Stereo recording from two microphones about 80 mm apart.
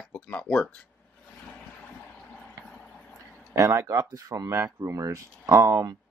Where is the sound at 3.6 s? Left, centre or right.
Right.